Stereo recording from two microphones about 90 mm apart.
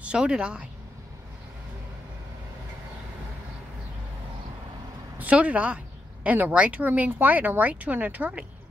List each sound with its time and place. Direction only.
0.0 s speech: 10° right (ahead or behind)
5.2 s speech: 15° right (ahead or behind)